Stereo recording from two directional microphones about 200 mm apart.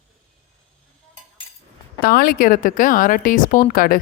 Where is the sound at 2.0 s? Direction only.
50° left (ahead or behind).